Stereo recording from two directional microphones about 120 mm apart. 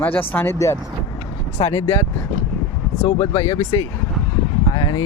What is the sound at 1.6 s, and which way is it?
Speech, 45° left (ahead or behind).